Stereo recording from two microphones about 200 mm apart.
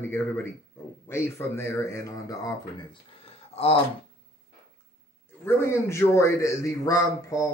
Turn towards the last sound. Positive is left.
turn(degrees=15)  # may be behind; listen again after turning